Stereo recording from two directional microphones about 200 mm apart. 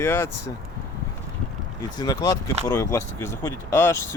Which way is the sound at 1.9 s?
20° left (ahead or behind).